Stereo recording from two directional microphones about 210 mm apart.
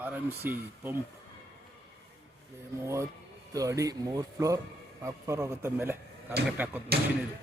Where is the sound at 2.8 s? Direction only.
15° right (ahead or behind).